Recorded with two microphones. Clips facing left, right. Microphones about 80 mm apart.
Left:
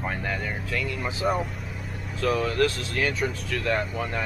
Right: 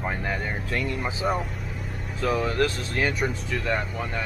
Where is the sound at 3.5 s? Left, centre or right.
Centre.